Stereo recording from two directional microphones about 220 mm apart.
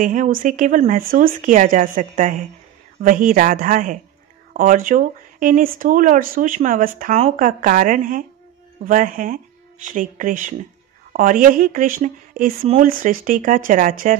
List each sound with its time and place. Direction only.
0.0 s speech: 35° right (ahead or behind)